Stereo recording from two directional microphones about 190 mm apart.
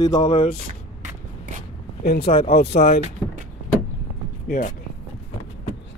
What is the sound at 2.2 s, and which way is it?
Speech, 30° left (ahead or behind).